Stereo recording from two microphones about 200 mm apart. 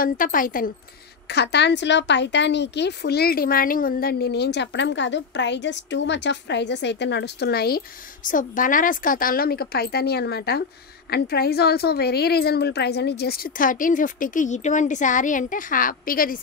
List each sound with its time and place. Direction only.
0.0 s a woman's voice: 45° left (ahead or behind)
1.3 s a woman's voice: 60° left (ahead or behind)